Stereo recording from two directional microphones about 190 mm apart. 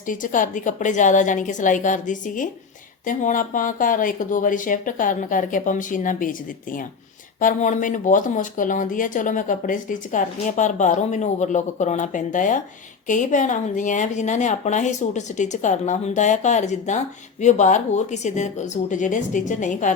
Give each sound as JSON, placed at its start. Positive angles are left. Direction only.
{"t": 0.1, "sound": "speech", "side_deg": 45}